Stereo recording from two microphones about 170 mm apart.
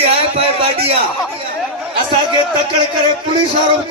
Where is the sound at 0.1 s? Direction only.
35° right (ahead or behind).